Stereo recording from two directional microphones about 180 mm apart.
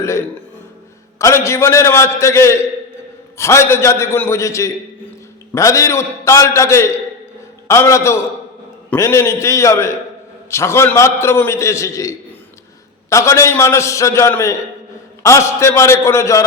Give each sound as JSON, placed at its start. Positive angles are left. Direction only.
{"t": 1.2, "sound": "a man's voice", "side_deg": 15}